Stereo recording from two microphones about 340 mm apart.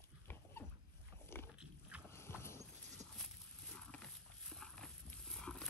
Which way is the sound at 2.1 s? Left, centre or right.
Centre.